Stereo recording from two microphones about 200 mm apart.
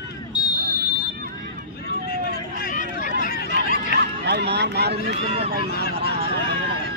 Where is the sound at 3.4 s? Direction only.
55° right (ahead or behind).